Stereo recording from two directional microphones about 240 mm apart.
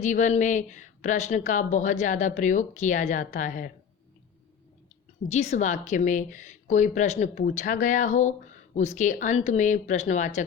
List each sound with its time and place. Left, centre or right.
0.0 s a woman's voice: left
5.3 s a woman's voice: left